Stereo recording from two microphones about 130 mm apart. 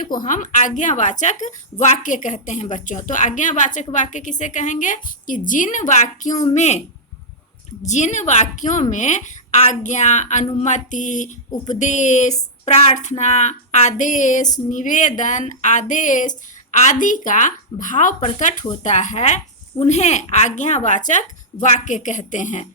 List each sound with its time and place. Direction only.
0.3 s a woman's voice: 75° left (ahead or behind)